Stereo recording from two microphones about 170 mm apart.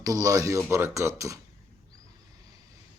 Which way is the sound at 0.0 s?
20° right (ahead or behind).